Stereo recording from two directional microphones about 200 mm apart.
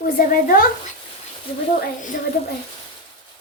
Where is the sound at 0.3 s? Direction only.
45° left (ahead or behind).